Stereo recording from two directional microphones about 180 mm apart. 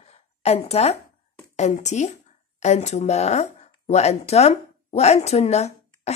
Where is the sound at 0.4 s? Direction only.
35° left (ahead or behind).